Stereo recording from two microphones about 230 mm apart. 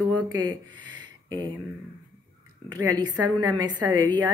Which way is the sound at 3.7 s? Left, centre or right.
Centre.